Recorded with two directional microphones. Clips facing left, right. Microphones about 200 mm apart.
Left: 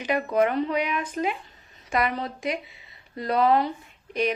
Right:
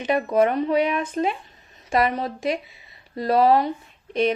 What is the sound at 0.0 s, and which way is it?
Speech, 25° right (ahead or behind).